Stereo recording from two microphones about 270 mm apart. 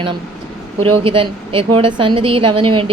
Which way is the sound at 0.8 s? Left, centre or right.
Centre.